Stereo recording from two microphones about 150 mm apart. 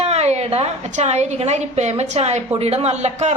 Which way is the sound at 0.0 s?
45° right (ahead or behind).